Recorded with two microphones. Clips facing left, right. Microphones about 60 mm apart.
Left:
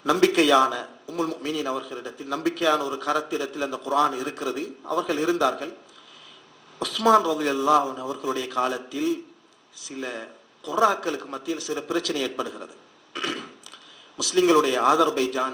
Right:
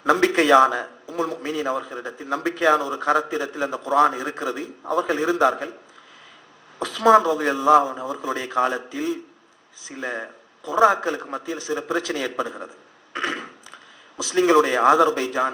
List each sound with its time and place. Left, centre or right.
0.0 s speech: right
6.7 s speech: right
13.1 s a sound: right
14.2 s speech: right